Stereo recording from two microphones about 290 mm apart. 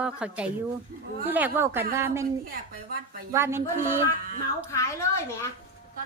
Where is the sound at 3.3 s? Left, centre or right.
Centre.